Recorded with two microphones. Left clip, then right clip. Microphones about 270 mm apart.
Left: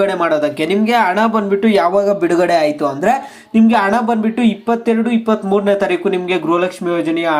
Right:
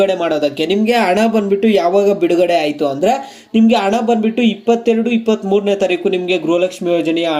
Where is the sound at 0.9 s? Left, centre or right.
Centre.